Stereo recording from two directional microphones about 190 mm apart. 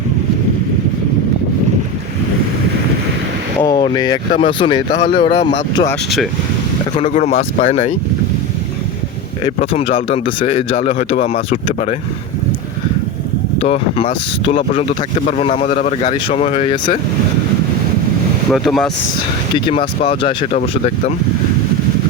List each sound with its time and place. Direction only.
3.6 s vehicle: 25° left (ahead or behind)
4.4 s speech: 25° left (ahead or behind)
5.7 s speech: 15° left (ahead or behind)
6.9 s speech: 35° left (ahead or behind)
9.6 s speech: 30° left (ahead or behind)
13.6 s speech: 30° left (ahead or behind)
18.5 s speech: centre (ahead or behind)
19.5 s speech: 25° left (ahead or behind)
20.6 s speech: 40° left (ahead or behind)